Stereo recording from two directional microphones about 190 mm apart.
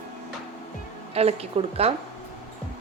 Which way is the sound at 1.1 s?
30° right (ahead or behind).